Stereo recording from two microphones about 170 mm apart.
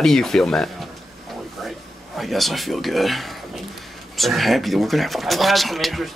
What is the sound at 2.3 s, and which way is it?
Speech, centre (ahead or behind).